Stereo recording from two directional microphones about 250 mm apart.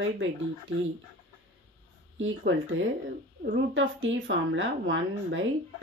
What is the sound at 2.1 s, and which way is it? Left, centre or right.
Speech, right.